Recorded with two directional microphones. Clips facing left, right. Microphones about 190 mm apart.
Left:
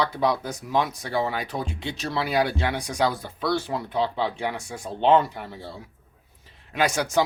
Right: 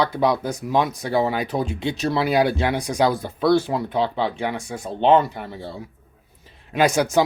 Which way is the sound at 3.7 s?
Centre (ahead or behind).